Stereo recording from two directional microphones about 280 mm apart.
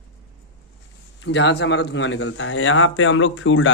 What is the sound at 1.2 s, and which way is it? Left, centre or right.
A man's voice, left.